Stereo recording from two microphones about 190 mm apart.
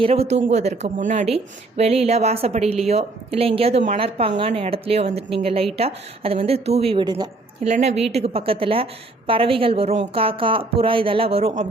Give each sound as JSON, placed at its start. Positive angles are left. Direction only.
{"t": 0.0, "sound": "a woman's voice", "side_deg": -30}
{"t": 7.7, "sound": "a woman's voice", "side_deg": -35}